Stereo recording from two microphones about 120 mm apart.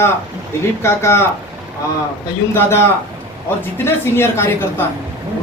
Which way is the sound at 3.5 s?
20° left (ahead or behind).